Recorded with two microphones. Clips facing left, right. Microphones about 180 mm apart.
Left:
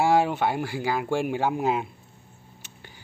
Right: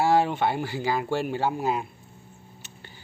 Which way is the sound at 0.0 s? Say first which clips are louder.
Even; 10° left (ahead or behind).